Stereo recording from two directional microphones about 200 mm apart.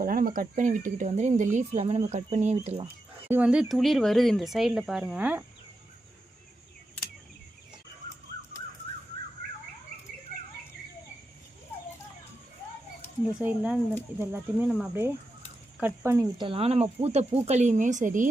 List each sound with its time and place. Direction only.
0.0 s speech: 45° right (ahead or behind); by 2.9 s 30° right (ahead or behind)
3.2 s speech: 10° right (ahead or behind)
13.4 s speech: 5° right (ahead or behind)
16.0 s speech: 20° right (ahead or behind); by 18.3 s 40° right (ahead or behind)